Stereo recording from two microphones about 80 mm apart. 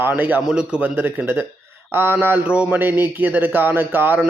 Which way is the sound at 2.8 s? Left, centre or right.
Right.